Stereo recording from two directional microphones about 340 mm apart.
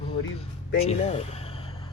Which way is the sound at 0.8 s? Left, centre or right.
Centre.